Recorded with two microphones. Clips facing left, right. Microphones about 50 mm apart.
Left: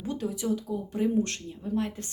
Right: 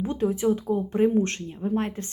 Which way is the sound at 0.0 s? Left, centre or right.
Right.